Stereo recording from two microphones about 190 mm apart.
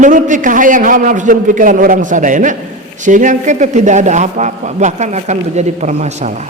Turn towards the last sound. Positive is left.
turn(degrees=-40)  # may be behind; listen again after turning